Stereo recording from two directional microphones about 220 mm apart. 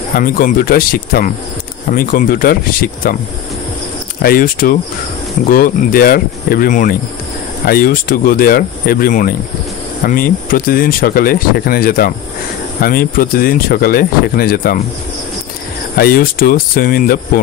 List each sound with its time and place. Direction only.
0.1 s speech: 40° left (ahead or behind)
4.2 s speech: 40° left (ahead or behind)
16.0 s speech: 40° left (ahead or behind)